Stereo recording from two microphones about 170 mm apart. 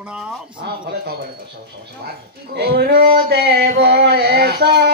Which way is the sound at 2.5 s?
70° right (ahead or behind).